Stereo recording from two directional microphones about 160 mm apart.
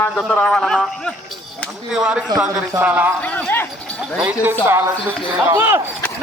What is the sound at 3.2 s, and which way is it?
Clip-clop, 10° left (ahead or behind).